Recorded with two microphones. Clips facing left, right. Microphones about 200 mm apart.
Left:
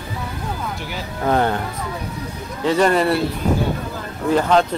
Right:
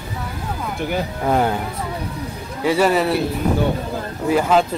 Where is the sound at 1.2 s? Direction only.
5° right (ahead or behind).